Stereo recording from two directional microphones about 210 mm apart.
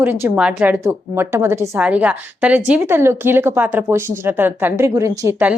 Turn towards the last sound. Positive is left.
turn(degrees=-10)  # may be behind; listen again after turning